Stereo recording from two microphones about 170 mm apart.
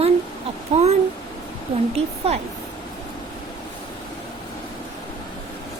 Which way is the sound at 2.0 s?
40° right (ahead or behind).